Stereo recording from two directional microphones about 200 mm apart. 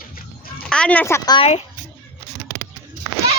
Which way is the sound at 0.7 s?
5° left (ahead or behind).